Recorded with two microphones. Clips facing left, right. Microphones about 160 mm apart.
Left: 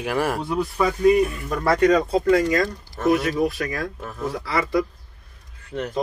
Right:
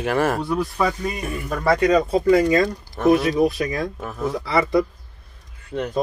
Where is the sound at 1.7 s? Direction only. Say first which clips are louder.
Even; 15° right (ahead or behind).